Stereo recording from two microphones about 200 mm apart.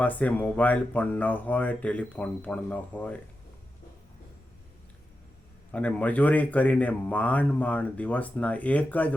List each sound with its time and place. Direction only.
0.0 s speech: 5° left (ahead or behind)
5.7 s speech: 5° left (ahead or behind)